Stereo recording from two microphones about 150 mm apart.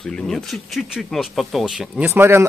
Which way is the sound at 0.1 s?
Centre (ahead or behind).